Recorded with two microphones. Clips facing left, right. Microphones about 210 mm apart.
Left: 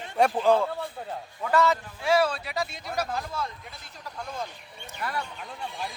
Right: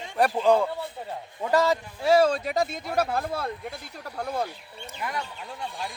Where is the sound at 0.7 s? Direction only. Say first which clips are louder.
Even; 20° right (ahead or behind).